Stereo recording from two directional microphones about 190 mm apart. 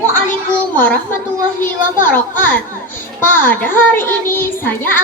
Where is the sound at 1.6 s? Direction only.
10° left (ahead or behind).